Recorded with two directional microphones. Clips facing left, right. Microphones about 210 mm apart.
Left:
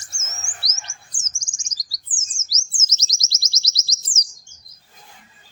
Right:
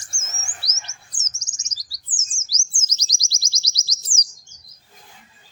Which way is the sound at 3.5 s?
25° left (ahead or behind).